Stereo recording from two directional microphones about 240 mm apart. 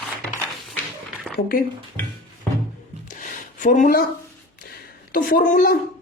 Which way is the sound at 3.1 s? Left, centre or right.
Left.